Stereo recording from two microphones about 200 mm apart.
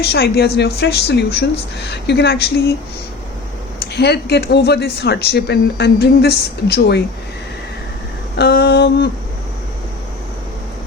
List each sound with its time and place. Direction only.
0.0 s speech: 55° left (ahead or behind)
3.9 s speech: 55° left (ahead or behind)
8.4 s a sound: 55° left (ahead or behind)